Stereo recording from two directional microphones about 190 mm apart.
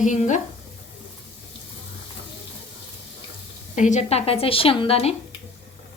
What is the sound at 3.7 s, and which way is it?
A woman's voice, 40° left (ahead or behind).